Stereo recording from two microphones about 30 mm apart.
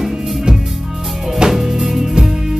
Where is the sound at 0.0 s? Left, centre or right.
Centre.